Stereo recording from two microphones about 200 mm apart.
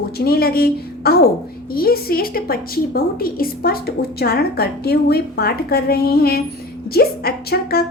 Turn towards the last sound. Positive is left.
turn(degrees=50)  # may be behind; listen again after turning